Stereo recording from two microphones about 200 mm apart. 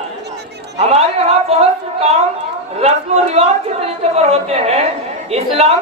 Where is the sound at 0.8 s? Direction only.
30° right (ahead or behind).